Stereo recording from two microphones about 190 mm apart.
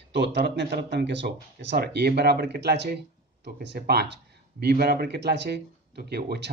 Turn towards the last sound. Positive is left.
turn(degrees=-60)  # may be behind; listen again after turning